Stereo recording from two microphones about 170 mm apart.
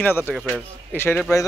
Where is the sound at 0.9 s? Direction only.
15° left (ahead or behind).